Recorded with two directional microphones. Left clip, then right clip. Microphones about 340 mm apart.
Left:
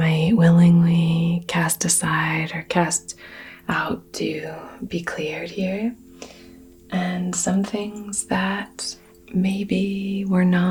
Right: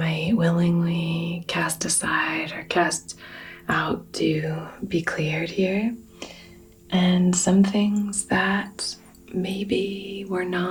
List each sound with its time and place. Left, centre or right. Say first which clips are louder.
0.0 s speech: left 4 dB; left